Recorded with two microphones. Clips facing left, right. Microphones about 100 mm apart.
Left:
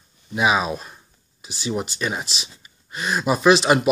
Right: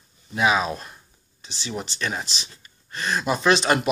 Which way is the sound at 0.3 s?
15° left (ahead or behind).